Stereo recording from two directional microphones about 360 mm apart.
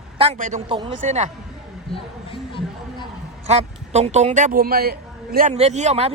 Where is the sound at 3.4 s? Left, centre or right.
Centre.